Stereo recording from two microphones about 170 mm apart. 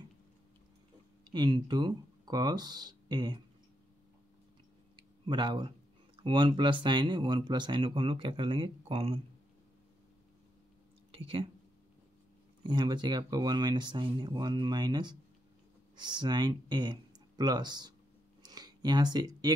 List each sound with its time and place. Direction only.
1.2 s speech: 25° right (ahead or behind)
4.9 s a sound: 25° right (ahead or behind)
6.1 s speech: 25° right (ahead or behind)
11.1 s speech: 35° right (ahead or behind)
12.6 s speech: 25° right (ahead or behind)
18.4 s a sound: 25° right (ahead or behind)